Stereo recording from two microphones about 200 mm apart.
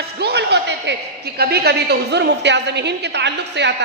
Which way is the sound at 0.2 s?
55° right (ahead or behind).